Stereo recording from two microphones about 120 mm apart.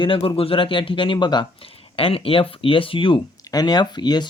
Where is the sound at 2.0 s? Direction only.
50° left (ahead or behind).